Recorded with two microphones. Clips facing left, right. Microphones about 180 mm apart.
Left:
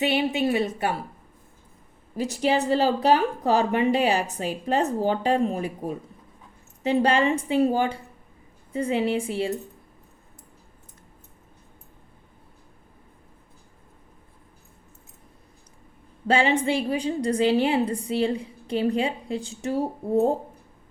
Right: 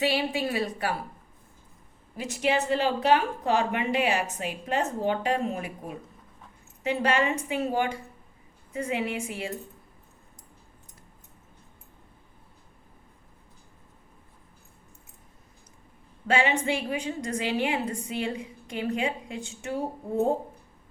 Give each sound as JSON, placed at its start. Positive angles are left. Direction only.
{"t": 0.0, "sound": "a woman's voice", "side_deg": 20}
{"t": 2.1, "sound": "a woman's voice", "side_deg": 35}
{"t": 6.8, "sound": "a woman's voice", "side_deg": 30}
{"t": 16.2, "sound": "a woman's voice", "side_deg": 35}